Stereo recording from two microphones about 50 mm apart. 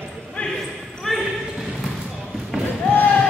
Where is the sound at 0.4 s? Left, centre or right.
Left.